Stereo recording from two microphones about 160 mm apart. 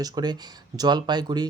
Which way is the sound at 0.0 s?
25° right (ahead or behind).